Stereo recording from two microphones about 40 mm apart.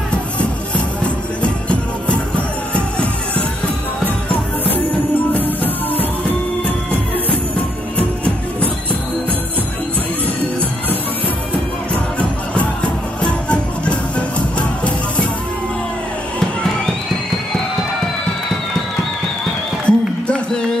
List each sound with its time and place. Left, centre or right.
0.1 s music: left
5.3 s music: left
11.9 s music: left
19.9 s a sound: left